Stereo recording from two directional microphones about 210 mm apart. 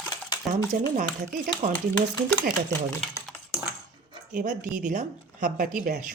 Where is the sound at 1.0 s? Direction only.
35° right (ahead or behind).